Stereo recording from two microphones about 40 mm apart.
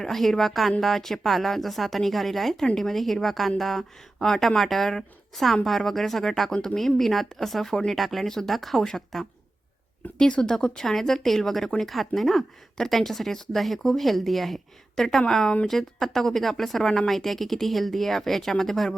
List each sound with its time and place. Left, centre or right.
0.0 s speech: centre
10.2 s speech: left